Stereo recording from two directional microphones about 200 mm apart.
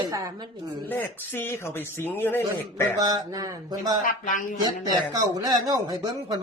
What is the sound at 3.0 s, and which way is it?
Speech, 20° right (ahead or behind).